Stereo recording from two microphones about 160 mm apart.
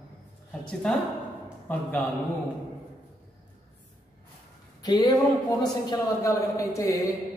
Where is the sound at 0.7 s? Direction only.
5° left (ahead or behind).